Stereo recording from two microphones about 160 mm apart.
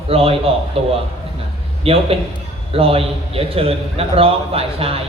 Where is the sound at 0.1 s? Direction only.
35° right (ahead or behind).